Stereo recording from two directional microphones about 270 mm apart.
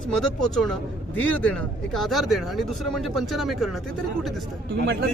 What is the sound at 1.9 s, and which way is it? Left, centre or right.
Speech, centre.